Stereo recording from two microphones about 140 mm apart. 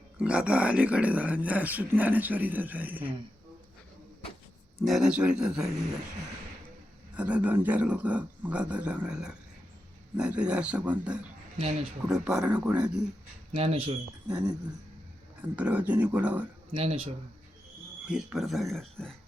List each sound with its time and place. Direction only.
0.2 s speech: 10° right (ahead or behind)
4.9 s speech: 5° right (ahead or behind)
7.2 s speech: 10° right (ahead or behind)
11.5 s speech: 40° right (ahead or behind)
12.2 s speech: 10° right (ahead or behind)
13.5 s speech: 45° right (ahead or behind)
15.4 s speech: 10° right (ahead or behind)
16.7 s speech: 40° right (ahead or behind)
18.1 s speech: 5° right (ahead or behind)